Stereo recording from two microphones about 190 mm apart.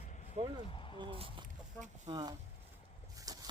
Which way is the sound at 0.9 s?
25° right (ahead or behind).